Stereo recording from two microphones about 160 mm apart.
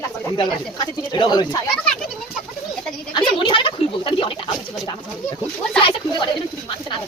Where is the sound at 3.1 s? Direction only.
30° left (ahead or behind).